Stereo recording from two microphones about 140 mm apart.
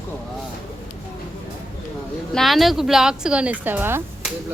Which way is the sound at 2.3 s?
Centre (ahead or behind).